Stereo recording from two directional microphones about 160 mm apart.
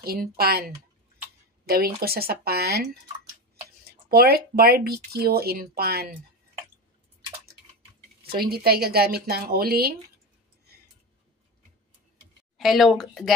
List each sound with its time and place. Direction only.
0.0 s speech: 70° right (ahead or behind)
8.4 s speech: 70° right (ahead or behind)
12.5 s speech: centre (ahead or behind)